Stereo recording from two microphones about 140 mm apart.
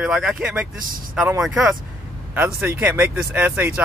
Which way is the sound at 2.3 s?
15° right (ahead or behind).